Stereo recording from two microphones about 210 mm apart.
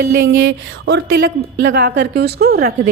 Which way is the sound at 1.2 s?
50° right (ahead or behind).